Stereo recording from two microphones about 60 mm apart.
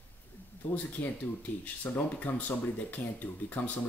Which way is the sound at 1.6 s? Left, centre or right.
Left.